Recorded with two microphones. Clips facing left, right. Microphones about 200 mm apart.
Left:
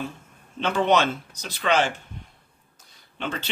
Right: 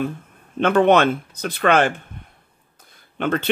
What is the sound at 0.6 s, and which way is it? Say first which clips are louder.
Speech: right 6 dB; 55° right (ahead or behind).